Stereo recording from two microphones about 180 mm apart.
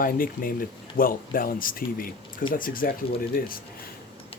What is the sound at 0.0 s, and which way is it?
Speech, 50° left (ahead or behind).